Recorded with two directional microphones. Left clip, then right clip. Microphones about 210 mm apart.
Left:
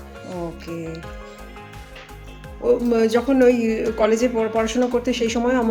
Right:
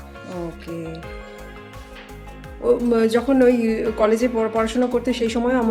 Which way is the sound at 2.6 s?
5° right (ahead or behind).